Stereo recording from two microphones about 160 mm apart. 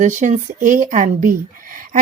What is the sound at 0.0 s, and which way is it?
A woman's voice, 50° right (ahead or behind).